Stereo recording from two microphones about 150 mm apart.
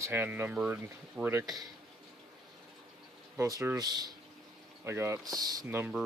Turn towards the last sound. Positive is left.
turn(degrees=-25)  # may be behind; listen again after turning